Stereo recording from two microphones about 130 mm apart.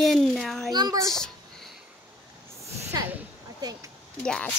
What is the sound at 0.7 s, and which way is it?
Speech, 30° right (ahead or behind).